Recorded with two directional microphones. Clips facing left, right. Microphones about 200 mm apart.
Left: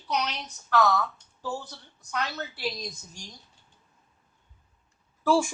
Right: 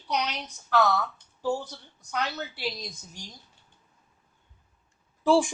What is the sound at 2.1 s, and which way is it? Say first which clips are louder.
Speech: right 1 dB; 15° right (ahead or behind).